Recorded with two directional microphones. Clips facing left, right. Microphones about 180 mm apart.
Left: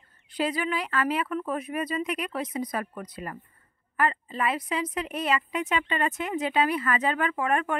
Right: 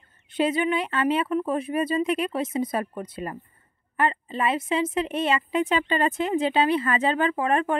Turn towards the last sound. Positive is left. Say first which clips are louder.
# right 3 dB
turn(degrees=-30)  # may be behind; listen again after turning